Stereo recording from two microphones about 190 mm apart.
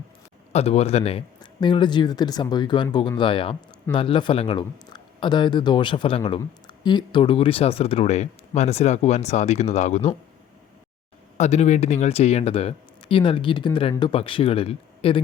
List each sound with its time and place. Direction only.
0.5 s speech: 35° left (ahead or behind)
11.3 s speech: 35° left (ahead or behind)